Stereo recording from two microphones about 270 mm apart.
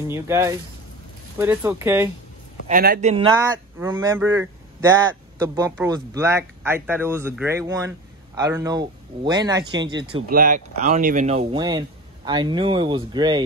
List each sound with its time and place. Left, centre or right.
0.1 s speech: centre
2.7 s speech: right
3.3 s speech: centre
10.3 s speech: right